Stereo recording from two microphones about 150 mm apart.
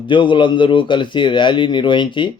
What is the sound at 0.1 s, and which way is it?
A man's voice, 35° left (ahead or behind).